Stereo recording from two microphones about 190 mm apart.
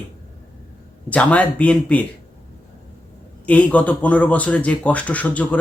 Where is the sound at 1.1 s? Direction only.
5° left (ahead or behind).